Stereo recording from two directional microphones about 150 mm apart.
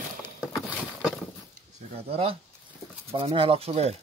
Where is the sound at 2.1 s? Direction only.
40° right (ahead or behind).